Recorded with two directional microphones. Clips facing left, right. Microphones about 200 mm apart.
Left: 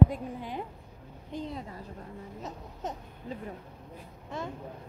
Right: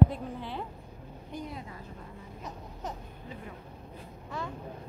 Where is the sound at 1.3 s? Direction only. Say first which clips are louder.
Left 3 dB; 30° left (ahead or behind).